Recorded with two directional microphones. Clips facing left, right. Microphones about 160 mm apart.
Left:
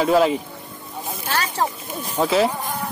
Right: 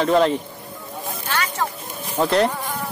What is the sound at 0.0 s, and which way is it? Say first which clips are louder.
Speech: even; 5° left (ahead or behind).